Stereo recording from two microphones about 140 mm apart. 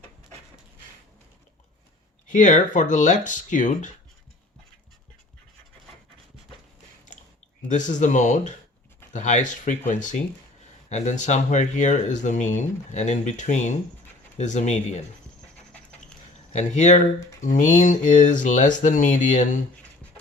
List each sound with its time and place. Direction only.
2.3 s speech: 65° left (ahead or behind)
7.7 s speech: 65° left (ahead or behind)
16.5 s speech: 60° left (ahead or behind)